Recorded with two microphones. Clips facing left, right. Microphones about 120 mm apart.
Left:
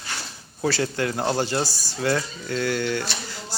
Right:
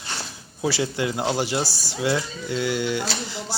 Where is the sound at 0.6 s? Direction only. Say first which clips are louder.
Even; 15° right (ahead or behind).